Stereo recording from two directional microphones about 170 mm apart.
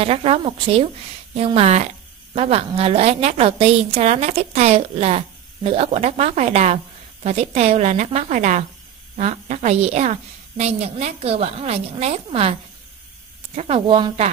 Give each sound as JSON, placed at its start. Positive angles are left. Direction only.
{"t": 0.0, "sound": "a woman's voice", "side_deg": -35}
{"t": 13.6, "sound": "a woman's voice", "side_deg": -35}